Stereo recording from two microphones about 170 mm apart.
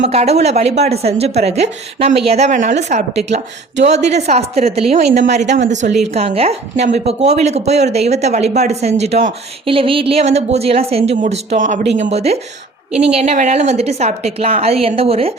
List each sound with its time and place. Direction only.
0.0 s speech: 40° right (ahead or behind)